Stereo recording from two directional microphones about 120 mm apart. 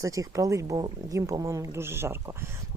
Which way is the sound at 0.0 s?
25° right (ahead or behind).